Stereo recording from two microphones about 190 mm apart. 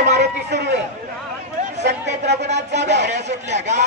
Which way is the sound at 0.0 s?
60° right (ahead or behind).